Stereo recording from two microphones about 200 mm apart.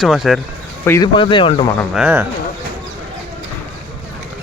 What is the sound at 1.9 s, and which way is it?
Speech, 5° right (ahead or behind).